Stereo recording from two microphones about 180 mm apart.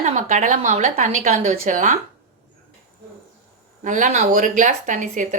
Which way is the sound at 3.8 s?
45° right (ahead or behind).